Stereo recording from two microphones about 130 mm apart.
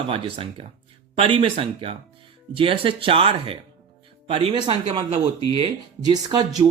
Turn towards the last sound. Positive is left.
turn(degrees=-35)  # may be behind; listen again after turning